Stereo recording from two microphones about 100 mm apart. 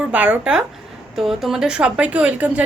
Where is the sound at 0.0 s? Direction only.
15° right (ahead or behind).